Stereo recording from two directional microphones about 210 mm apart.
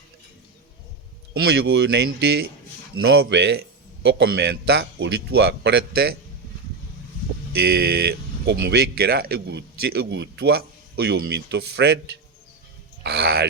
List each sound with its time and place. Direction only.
1.3 s speech: 50° right (ahead or behind)
7.5 s speech: 50° right (ahead or behind)